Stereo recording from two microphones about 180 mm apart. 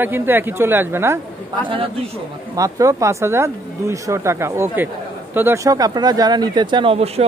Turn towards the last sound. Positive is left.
turn(degrees=-35)  # may be behind; listen again after turning